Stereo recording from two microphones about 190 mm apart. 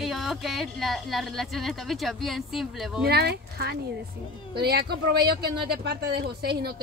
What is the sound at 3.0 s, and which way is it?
A woman's voice, 55° right (ahead or behind).